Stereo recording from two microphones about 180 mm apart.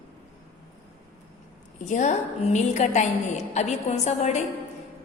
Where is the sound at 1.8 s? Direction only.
40° left (ahead or behind).